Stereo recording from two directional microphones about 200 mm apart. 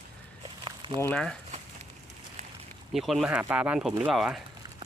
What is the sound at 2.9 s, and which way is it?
Speech, centre (ahead or behind).